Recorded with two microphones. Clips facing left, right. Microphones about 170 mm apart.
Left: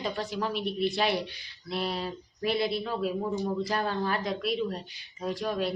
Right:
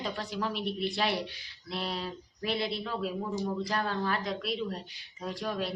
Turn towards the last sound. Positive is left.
turn(degrees=0)  # may be behind; listen again after turning